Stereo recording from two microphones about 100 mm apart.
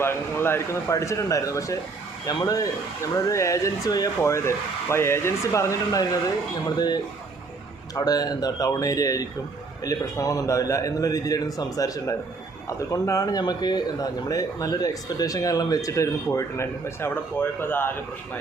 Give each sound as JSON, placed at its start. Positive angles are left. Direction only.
{"t": 0.0, "sound": "a man's voice", "side_deg": 25}
{"t": 4.2, "sound": "speech", "side_deg": 25}
{"t": 6.7, "sound": "a man's voice", "side_deg": 45}